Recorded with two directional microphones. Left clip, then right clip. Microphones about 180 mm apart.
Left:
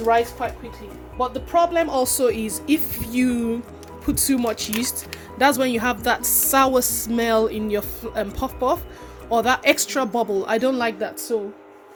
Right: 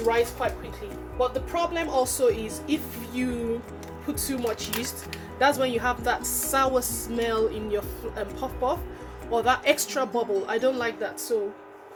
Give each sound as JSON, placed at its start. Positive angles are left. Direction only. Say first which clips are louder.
{"t": 1.2, "sound": "a woman's voice", "louder": "left 6 dB", "side_deg": 30}
{"t": 1.6, "sound": "speech", "louder": "left 6 dB", "side_deg": 45}
{"t": 11.3, "sound": "speech", "louder": "left 2 dB", "side_deg": 45}